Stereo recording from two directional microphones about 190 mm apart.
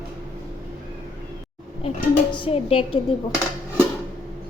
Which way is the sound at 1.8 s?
30° left (ahead or behind).